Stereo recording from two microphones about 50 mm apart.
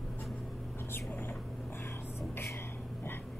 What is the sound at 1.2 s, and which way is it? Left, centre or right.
Vehicle, left.